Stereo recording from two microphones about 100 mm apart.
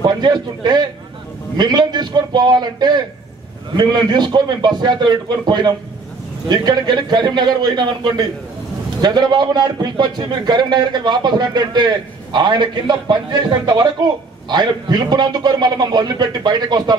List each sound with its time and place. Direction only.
0.0 s a man's voice: 45° right (ahead or behind)